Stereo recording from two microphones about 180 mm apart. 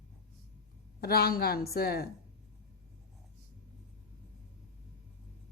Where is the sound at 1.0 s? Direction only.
60° left (ahead or behind).